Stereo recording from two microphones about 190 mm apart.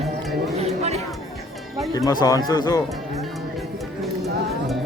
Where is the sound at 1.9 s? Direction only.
20° left (ahead or behind).